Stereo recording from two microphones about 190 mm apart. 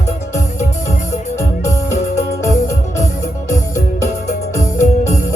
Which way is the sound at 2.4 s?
15° left (ahead or behind).